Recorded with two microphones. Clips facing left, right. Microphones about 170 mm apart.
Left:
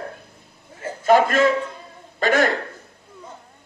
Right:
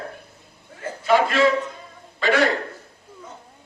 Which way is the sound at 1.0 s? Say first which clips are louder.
Left 2 dB; 45° left (ahead or behind).